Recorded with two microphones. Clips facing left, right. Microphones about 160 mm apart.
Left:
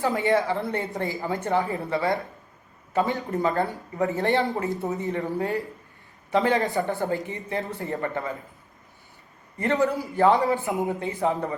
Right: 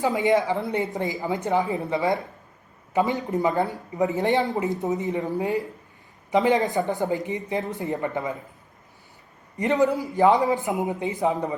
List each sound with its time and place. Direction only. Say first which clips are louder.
0.0 s speech: right 2 dB; 15° right (ahead or behind)
9.6 s speech: right 2 dB; 20° right (ahead or behind)